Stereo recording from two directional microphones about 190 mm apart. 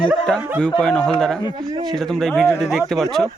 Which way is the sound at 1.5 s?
20° right (ahead or behind).